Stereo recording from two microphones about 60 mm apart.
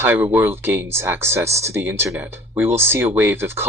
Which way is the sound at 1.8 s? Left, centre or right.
Right.